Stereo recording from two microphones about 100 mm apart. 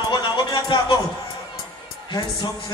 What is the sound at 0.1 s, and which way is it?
Music, 55° left (ahead or behind).